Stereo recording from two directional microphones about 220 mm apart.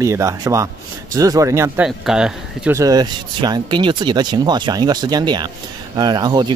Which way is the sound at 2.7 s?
15° right (ahead or behind).